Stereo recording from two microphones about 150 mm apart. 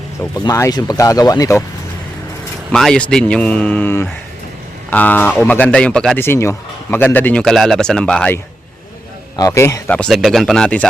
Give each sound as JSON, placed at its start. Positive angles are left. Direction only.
{"t": 0.3, "sound": "speech", "side_deg": 20}
{"t": 2.7, "sound": "speech", "side_deg": 5}
{"t": 6.2, "sound": "speech", "side_deg": 15}
{"t": 9.3, "sound": "speech", "side_deg": 20}